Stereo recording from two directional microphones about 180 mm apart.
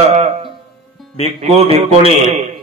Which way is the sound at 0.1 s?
35° right (ahead or behind).